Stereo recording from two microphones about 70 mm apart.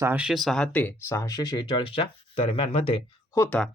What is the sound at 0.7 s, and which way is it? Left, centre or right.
Speech, left.